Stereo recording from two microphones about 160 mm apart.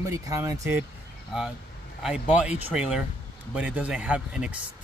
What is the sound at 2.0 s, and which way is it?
Speech, 5° right (ahead or behind).